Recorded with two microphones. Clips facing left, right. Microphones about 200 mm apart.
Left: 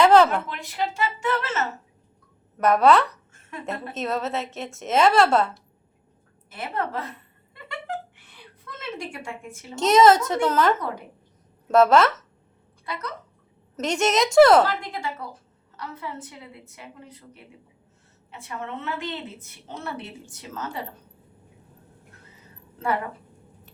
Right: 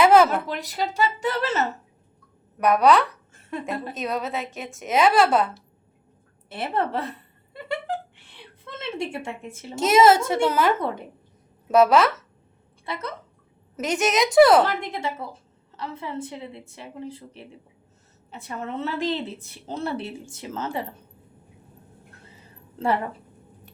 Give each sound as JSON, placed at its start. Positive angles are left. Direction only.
{"t": 0.0, "sound": "a sound", "side_deg": -5}
{"t": 0.4, "sound": "a woman's voice", "side_deg": -40}
{"t": 2.6, "sound": "a woman's voice", "side_deg": 0}
{"t": 6.5, "sound": "a woman's voice", "side_deg": -30}
{"t": 7.5, "sound": "a sound", "side_deg": -35}
{"t": 8.6, "sound": "a woman's voice", "side_deg": -25}
{"t": 9.7, "sound": "a woman's voice", "side_deg": -5}
{"t": 10.8, "sound": "a woman's voice", "side_deg": -25}
{"t": 11.7, "sound": "a woman's voice", "side_deg": 0}
{"t": 12.8, "sound": "a woman's voice", "side_deg": -25}
{"t": 13.7, "sound": "a woman's voice", "side_deg": 0}
{"t": 14.6, "sound": "a woman's voice", "side_deg": -20}